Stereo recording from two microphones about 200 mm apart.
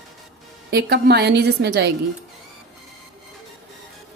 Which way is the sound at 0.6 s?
55° right (ahead or behind).